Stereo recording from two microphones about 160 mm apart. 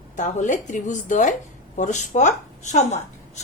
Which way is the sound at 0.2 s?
50° left (ahead or behind).